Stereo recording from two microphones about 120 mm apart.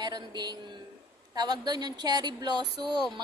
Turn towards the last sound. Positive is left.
turn(degrees=-35)  # may be behind; listen again after turning